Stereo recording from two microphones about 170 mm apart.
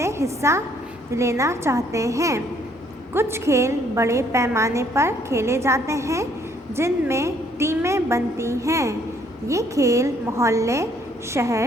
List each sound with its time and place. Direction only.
0.0 s a woman's voice: 15° right (ahead or behind)